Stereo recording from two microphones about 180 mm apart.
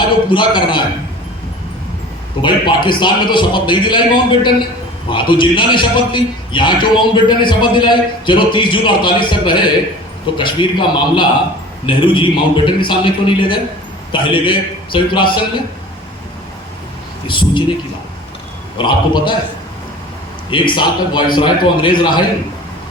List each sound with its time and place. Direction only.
0.3 s a man's voice: 25° left (ahead or behind)
2.4 s a man's voice: 25° left (ahead or behind)
17.2 s a man's voice: 25° left (ahead or behind)
18.8 s a man's voice: 25° left (ahead or behind)
20.5 s a man's voice: 25° left (ahead or behind)